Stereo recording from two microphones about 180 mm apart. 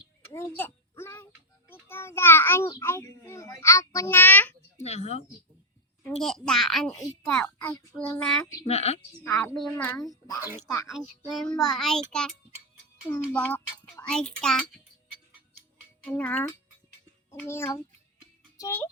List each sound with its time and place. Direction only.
0.3 s a sound: 15° left (ahead or behind)
1.9 s a child's voice: 15° left (ahead or behind)
4.8 s a woman's voice: 40° left (ahead or behind)
6.1 s a child's voice: centre (ahead or behind)
8.6 s a woman's voice: 35° left (ahead or behind)
9.2 s a child's voice: 5° left (ahead or behind)
9.8 s speech: 15° left (ahead or behind)
10.8 s a child's voice: centre (ahead or behind)
16.0 s a child's voice: 10° left (ahead or behind)
18.5 s music: 20° left (ahead or behind)